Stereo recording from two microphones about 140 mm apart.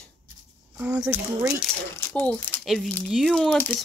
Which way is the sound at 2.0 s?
20° left (ahead or behind).